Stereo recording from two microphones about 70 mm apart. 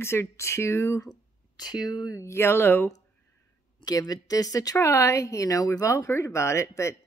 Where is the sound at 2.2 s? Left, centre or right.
Left.